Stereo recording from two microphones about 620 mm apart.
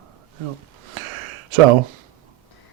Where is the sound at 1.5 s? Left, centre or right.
Right.